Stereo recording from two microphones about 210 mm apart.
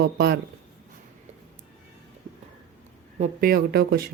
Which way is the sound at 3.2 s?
45° right (ahead or behind).